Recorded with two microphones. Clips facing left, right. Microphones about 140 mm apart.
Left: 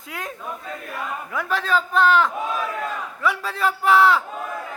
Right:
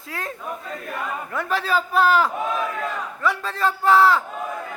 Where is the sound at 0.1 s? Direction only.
Centre (ahead or behind).